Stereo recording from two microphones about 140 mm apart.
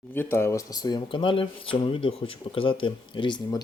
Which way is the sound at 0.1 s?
15° left (ahead or behind).